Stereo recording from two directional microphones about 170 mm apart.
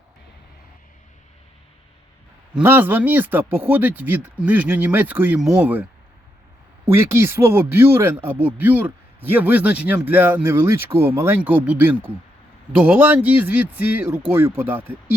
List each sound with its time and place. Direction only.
2.6 s speech: 10° right (ahead or behind)
6.9 s speech: 15° right (ahead or behind)